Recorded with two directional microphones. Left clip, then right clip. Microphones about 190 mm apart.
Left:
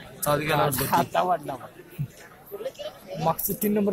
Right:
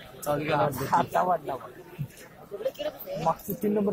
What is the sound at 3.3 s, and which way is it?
Speech, 50° left (ahead or behind).